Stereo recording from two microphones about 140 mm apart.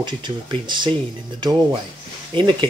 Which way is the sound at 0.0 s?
35° right (ahead or behind).